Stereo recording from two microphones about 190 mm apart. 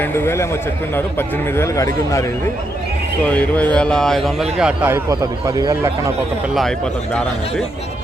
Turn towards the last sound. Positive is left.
turn(degrees=5)  # may be behind; listen again after turning